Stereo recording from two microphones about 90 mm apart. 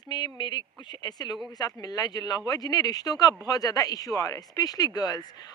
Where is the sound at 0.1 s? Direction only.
55° left (ahead or behind).